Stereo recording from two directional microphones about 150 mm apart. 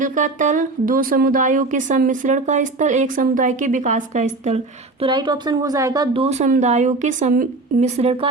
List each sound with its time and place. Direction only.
0.0 s speech: 60° right (ahead or behind)
5.1 s speech: 30° right (ahead or behind)
6.1 s a woman's voice: 45° right (ahead or behind)